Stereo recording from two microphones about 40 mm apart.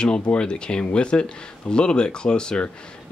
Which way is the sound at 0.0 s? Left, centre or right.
Left.